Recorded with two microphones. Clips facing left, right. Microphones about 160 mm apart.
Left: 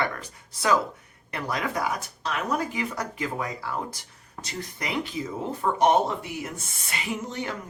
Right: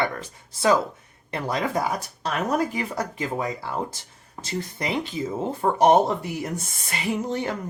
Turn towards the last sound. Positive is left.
turn(degrees=-35)  # may be behind; listen again after turning